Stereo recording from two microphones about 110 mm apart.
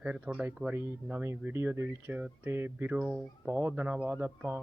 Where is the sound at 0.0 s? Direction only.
10° right (ahead or behind).